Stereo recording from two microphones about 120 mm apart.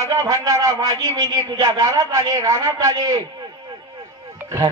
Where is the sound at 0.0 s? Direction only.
30° right (ahead or behind).